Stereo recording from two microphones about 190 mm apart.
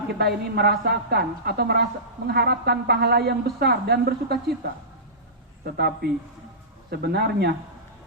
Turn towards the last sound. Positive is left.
turn(degrees=-55)  # may be behind; listen again after turning